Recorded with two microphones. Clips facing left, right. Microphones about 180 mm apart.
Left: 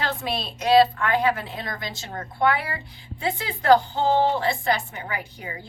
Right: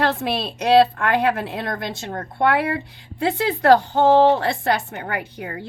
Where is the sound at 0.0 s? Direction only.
65° right (ahead or behind).